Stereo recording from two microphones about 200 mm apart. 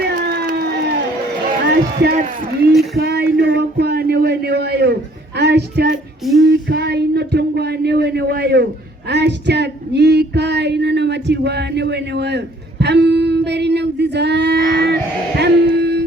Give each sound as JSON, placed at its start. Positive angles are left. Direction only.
{"t": 0.2, "sound": "a sound", "side_deg": -50}
{"t": 1.7, "sound": "female singing", "side_deg": -55}
{"t": 5.9, "sound": "child singing", "side_deg": 0}
{"t": 6.5, "sound": "female singing", "side_deg": -55}
{"t": 15.4, "sound": "music", "side_deg": -55}